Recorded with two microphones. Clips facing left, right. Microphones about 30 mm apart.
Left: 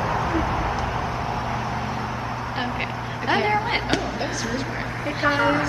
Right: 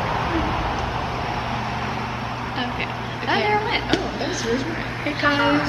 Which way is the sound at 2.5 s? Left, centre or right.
Centre.